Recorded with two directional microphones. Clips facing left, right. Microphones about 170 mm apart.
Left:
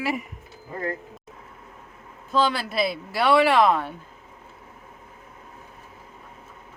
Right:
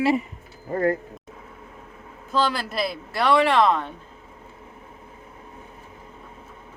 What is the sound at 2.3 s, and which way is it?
Speech, centre (ahead or behind).